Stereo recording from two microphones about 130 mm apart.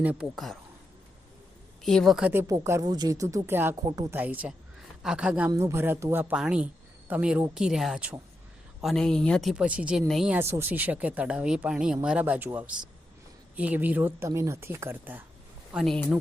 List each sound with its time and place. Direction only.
0.0 s speech: 10° right (ahead or behind)
0.3 s speech: centre (ahead or behind)
1.8 s speech: 5° left (ahead or behind)
2.3 s speech: 20° right (ahead or behind)
3.8 s speech: 30° right (ahead or behind)
4.1 s speech: 15° right (ahead or behind)
5.5 s speech: 20° right (ahead or behind); by 10.3 s centre (ahead or behind)
10.3 s speech: 20° right (ahead or behind)
15.7 s speech: centre (ahead or behind)